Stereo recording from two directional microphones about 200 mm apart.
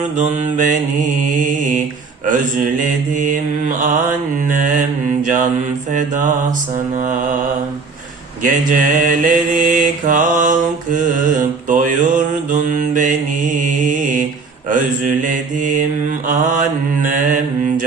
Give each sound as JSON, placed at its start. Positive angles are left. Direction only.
{"t": 0.2, "sound": "mantra", "side_deg": -35}
{"t": 2.8, "sound": "mantra", "side_deg": -40}
{"t": 8.4, "sound": "mantra", "side_deg": -40}